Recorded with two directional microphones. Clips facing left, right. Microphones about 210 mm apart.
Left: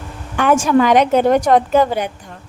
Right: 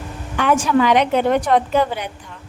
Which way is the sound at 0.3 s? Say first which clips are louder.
Left 3 dB; 45° left (ahead or behind).